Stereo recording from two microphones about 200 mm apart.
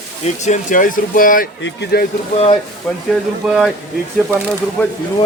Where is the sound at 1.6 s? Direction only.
55° left (ahead or behind).